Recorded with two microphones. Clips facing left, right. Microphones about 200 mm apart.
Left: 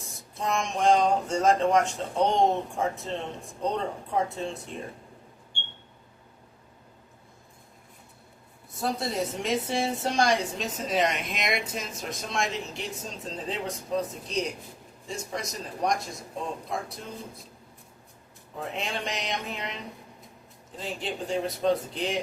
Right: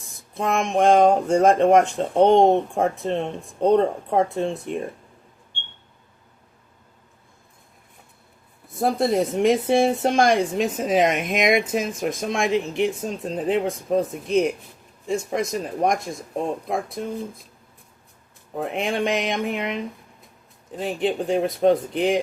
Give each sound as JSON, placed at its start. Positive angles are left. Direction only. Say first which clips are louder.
{"t": 0.3, "sound": "speech", "louder": "right 8 dB", "side_deg": -55}
{"t": 8.8, "sound": "speech", "louder": "right 9 dB", "side_deg": -55}
{"t": 17.0, "sound": "speech", "louder": "right 12 dB", "side_deg": -60}
{"t": 18.5, "sound": "speech", "louder": "right 8 dB", "side_deg": -55}